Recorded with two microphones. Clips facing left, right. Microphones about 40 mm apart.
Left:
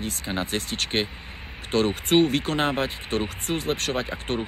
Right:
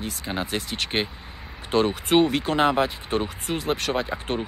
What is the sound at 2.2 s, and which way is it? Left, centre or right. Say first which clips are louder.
Speech: even; left.